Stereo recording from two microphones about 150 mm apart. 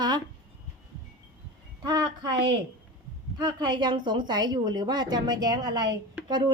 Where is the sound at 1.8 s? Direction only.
30° right (ahead or behind).